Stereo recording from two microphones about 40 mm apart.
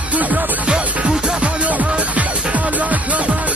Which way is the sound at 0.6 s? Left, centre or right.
Right.